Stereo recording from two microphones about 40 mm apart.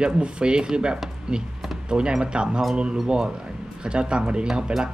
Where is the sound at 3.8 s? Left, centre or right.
Right.